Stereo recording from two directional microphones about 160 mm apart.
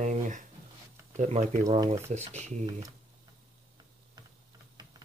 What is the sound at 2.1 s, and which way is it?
Speech, 45° right (ahead or behind).